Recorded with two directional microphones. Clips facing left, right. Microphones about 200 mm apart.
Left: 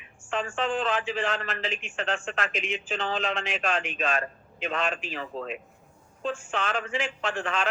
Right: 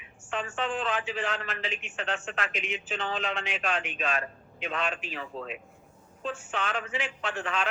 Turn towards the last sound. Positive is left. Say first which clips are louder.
# left 2 dB
turn(degrees=45)  # may be behind; listen again after turning